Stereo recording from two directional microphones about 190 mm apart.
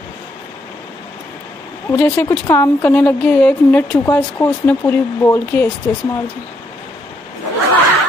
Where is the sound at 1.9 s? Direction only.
15° left (ahead or behind).